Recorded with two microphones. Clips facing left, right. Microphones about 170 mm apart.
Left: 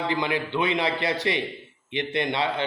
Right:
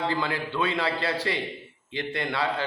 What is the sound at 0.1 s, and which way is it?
A man's voice, 20° left (ahead or behind).